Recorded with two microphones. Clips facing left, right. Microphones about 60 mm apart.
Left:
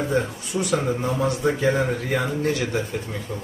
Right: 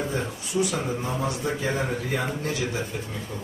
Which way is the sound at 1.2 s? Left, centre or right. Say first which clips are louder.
Left 9 dB; left.